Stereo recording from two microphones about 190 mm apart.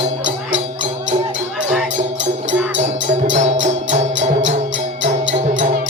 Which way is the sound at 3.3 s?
40° right (ahead or behind).